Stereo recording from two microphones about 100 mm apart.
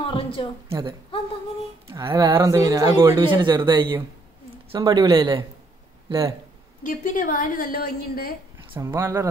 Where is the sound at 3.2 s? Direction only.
55° right (ahead or behind).